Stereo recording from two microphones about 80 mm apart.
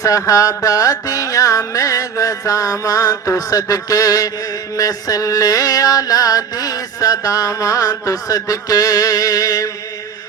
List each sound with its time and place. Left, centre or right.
0.0 s music: left